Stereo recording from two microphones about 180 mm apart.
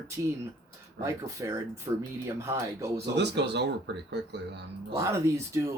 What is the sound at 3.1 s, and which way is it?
Speech, 70° right (ahead or behind).